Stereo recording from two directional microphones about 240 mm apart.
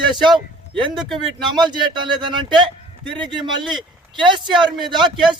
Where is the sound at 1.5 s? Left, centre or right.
Centre.